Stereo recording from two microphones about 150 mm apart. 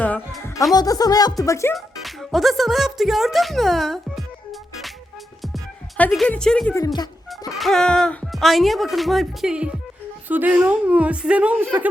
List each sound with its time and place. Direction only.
0.7 s speech: 25° left (ahead or behind)
1.7 s speech: centre (ahead or behind)
6.0 s speech: 5° left (ahead or behind)
6.7 s speech: 25° left (ahead or behind)
7.6 s a woman's voice: 5° left (ahead or behind)